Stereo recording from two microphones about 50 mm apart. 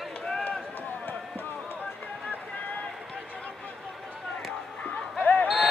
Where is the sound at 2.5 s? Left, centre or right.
Left.